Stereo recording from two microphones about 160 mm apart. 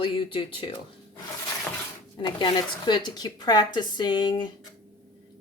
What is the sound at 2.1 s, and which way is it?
Speech, 30° left (ahead or behind).